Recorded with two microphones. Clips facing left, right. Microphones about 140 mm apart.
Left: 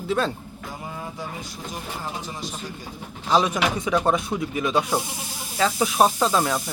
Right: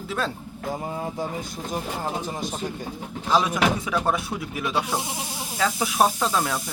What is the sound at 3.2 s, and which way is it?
Speech, 5° right (ahead or behind).